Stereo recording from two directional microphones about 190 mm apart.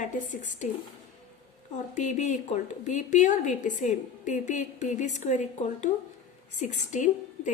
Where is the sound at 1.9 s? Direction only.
40° left (ahead or behind).